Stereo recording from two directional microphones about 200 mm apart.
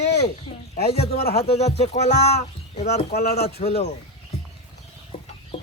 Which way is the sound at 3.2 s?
50° left (ahead or behind).